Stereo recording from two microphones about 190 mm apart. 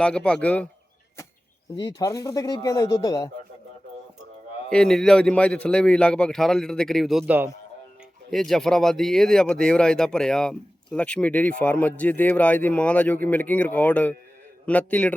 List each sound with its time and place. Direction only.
0.0 s speech: 5° left (ahead or behind)
1.8 s speech: 20° left (ahead or behind)
4.7 s speech: 5° left (ahead or behind)
8.3 s a man's voice: centre (ahead or behind)